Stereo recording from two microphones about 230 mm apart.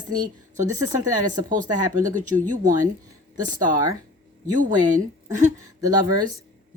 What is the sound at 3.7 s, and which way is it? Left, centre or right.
Speech, centre.